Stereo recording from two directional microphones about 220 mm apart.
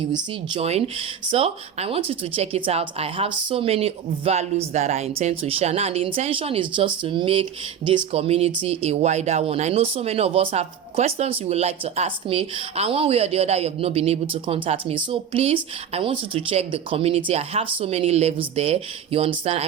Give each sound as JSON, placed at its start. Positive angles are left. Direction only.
{"t": 0.1, "sound": "speech", "side_deg": -25}